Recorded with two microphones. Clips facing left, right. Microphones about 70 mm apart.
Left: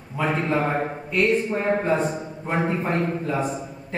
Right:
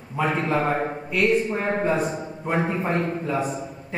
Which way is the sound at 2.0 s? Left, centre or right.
Centre.